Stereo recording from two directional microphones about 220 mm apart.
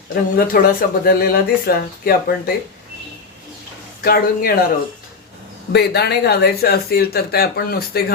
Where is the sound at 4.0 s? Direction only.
45° left (ahead or behind).